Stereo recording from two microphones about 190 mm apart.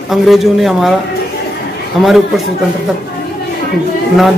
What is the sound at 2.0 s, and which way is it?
Speech, centre (ahead or behind).